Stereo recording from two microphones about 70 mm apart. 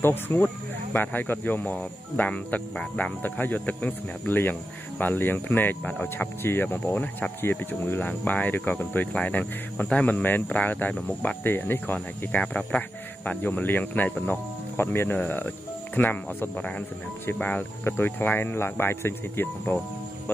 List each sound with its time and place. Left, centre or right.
0.0 s speech: left
12.3 s speech: centre
17.8 s speech: left